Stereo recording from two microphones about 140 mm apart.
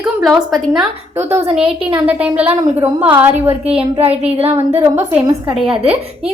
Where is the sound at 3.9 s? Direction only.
45° right (ahead or behind).